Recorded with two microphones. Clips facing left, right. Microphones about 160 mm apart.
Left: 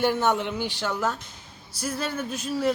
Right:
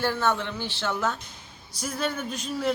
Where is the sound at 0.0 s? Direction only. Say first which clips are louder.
Left 3 dB; 20° left (ahead or behind).